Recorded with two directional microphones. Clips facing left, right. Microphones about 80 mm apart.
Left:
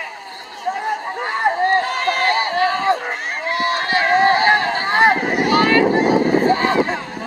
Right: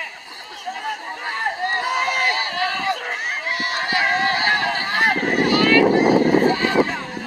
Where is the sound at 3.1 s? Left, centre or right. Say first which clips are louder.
Left 2 dB; centre.